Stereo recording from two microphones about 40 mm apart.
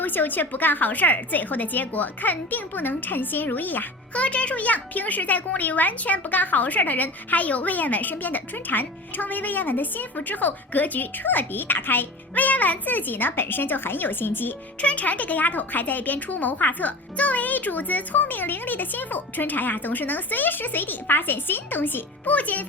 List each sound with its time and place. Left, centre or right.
0.0 s speech: left
4.1 s speech: left
12.3 s a woman's voice: left
14.8 s speech: left
22.4 s speech: left